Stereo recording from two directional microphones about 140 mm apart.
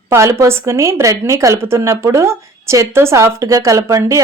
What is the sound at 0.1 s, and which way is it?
A woman's voice, 20° right (ahead or behind).